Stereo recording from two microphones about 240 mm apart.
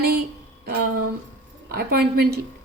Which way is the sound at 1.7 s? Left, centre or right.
Right.